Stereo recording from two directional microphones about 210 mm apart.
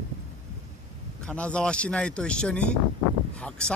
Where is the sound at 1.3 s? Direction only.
5° left (ahead or behind).